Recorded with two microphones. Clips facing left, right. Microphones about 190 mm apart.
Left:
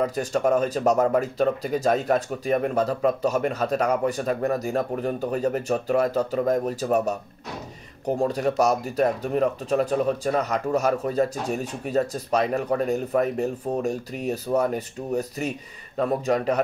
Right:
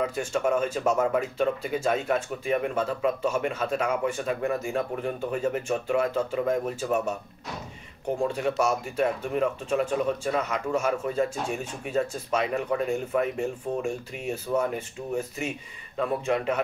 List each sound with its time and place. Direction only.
0.0 s speech: 40° left (ahead or behind)
8.2 s speech: 40° left (ahead or behind)